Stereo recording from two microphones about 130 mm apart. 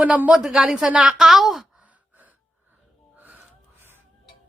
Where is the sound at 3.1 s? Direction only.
15° right (ahead or behind).